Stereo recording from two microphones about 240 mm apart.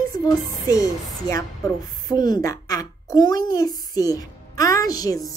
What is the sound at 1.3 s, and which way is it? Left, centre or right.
A woman's voice, centre.